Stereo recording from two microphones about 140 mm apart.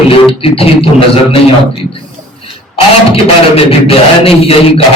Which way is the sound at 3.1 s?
45° left (ahead or behind).